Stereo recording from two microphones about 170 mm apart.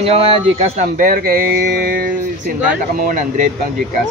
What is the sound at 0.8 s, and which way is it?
Speech, 55° right (ahead or behind).